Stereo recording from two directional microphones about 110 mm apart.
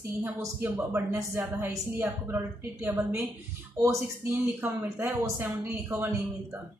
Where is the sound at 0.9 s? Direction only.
25° right (ahead or behind).